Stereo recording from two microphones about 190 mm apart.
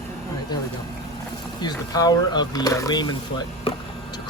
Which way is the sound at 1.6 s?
20° left (ahead or behind).